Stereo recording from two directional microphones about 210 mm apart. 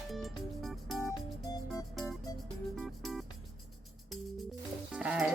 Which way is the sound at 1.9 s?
Centre (ahead or behind).